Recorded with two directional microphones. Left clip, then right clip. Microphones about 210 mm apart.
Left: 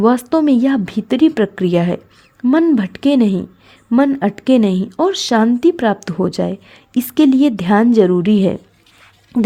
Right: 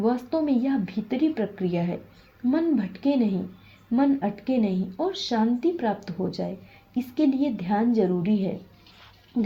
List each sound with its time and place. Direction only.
0.0 s speech: 50° left (ahead or behind)